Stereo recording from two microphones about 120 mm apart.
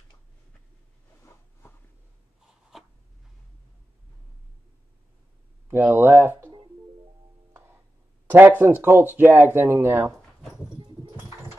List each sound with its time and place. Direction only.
2.7 s a sound: 5° right (ahead or behind)
5.7 s speech: 15° right (ahead or behind)
7.5 s music: 20° right (ahead or behind)
8.3 s speech: 15° right (ahead or behind)